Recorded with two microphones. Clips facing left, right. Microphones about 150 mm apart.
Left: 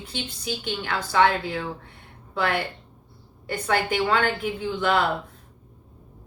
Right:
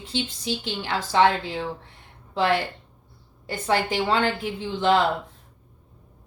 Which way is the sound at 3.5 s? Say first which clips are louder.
Even; 25° right (ahead or behind).